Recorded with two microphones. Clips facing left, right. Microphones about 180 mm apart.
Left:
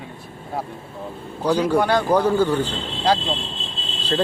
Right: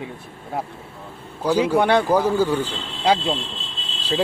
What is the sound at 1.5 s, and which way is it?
Speech, 10° right (ahead or behind).